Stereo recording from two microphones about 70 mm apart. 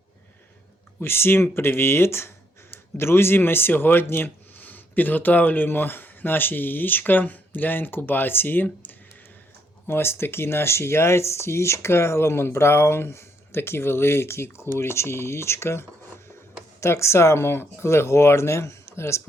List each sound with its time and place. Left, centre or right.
0.9 s speech: left